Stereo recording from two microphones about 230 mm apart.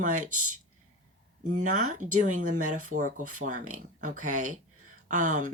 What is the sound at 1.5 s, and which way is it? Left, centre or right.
Speech, right.